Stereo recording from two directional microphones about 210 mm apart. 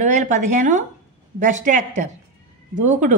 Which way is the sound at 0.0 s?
35° right (ahead or behind).